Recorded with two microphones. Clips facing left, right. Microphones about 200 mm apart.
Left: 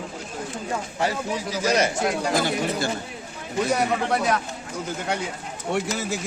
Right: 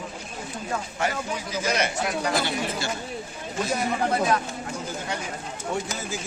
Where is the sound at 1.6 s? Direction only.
40° left (ahead or behind).